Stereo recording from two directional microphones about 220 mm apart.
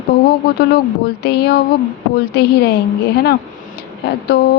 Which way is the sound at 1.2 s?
50° left (ahead or behind).